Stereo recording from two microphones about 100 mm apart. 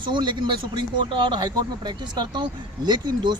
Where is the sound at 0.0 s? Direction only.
50° right (ahead or behind).